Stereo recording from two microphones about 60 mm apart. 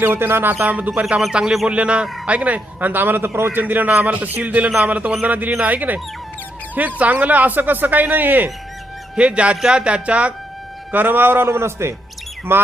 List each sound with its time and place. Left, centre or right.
0.0 s a man's voice: right
0.6 s a man's voice: right
1.2 s a man's voice: centre; by 8.4 s right
9.1 s a man's voice: centre
10.9 s a man's voice: right
11.4 s a man's voice: right